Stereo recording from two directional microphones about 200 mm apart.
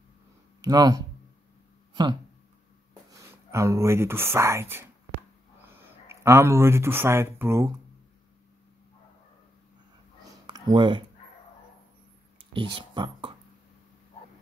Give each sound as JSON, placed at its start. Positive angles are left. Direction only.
{"t": 0.6, "sound": "speech", "side_deg": -20}
{"t": 6.0, "sound": "speech", "side_deg": -15}
{"t": 10.4, "sound": "speech", "side_deg": -25}
{"t": 12.4, "sound": "a sound", "side_deg": -25}